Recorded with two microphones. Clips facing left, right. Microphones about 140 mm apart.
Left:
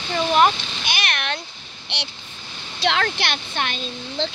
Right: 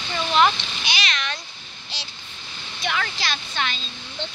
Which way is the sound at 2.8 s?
70° left (ahead or behind).